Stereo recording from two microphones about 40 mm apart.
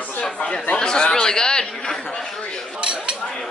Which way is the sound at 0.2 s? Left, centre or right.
Left.